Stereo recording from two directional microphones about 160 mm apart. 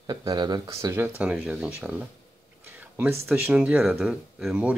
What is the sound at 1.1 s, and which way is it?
Speech, 5° right (ahead or behind).